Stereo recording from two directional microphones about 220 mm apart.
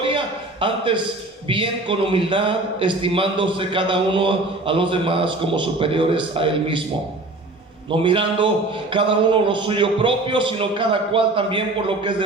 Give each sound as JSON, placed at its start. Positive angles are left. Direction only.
{"t": 0.1, "sound": "a sound", "side_deg": -20}
{"t": 1.5, "sound": "a man's voice", "side_deg": -25}
{"t": 7.9, "sound": "a man's voice", "side_deg": -25}